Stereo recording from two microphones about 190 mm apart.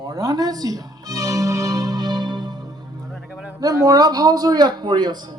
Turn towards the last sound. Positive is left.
turn(degrees=-25)  # may be behind; listen again after turning